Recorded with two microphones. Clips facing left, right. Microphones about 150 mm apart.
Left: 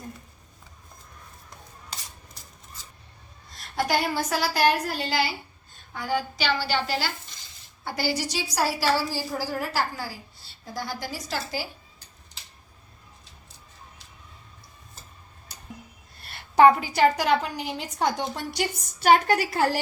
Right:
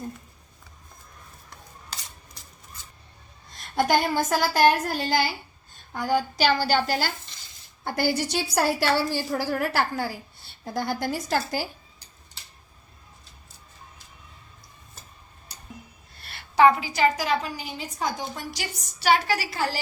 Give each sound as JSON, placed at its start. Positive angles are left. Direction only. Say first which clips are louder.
{"t": 3.8, "sound": "a woman's voice", "louder": "right 3 dB", "side_deg": -45}
{"t": 16.2, "sound": "a sound", "louder": "left 2 dB", "side_deg": 45}
{"t": 16.8, "sound": "a woman's voice", "louder": "left 2 dB", "side_deg": 55}
{"t": 17.6, "sound": "a woman's voice", "louder": "left 4 dB", "side_deg": 70}